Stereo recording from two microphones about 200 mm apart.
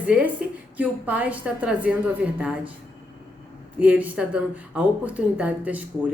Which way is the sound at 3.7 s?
5° right (ahead or behind).